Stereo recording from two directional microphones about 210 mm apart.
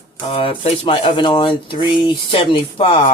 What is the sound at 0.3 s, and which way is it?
Speech, 30° left (ahead or behind).